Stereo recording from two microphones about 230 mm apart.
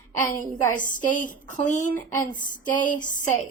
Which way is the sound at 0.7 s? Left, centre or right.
Left.